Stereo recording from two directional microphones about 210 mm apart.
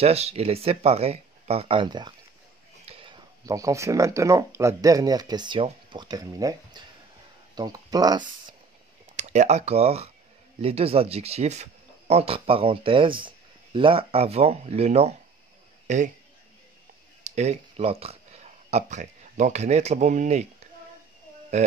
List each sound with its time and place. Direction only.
0.0 s speech: 30° right (ahead or behind)
9.1 s a man's voice: 35° right (ahead or behind)
17.2 s speech: 30° right (ahead or behind)